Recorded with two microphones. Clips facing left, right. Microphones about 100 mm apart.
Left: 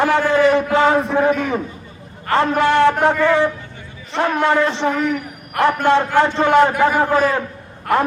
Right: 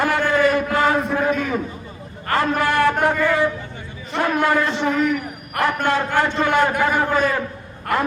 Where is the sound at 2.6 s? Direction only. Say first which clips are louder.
Left 5 dB; 25° left (ahead or behind).